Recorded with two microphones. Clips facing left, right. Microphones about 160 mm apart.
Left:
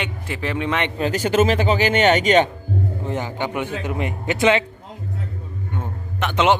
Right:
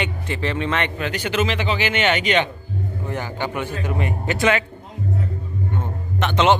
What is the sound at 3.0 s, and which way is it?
A man's voice, 20° left (ahead or behind).